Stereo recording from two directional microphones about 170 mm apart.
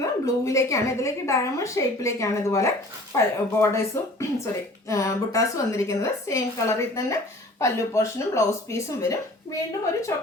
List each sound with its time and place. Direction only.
0.0 s a woman's voice: 20° left (ahead or behind)